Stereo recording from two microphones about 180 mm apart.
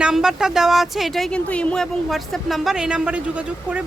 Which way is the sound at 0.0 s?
5° right (ahead or behind).